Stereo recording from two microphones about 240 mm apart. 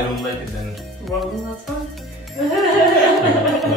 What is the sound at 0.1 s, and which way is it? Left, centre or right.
Music, centre.